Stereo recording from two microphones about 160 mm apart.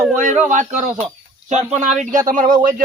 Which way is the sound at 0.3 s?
50° right (ahead or behind).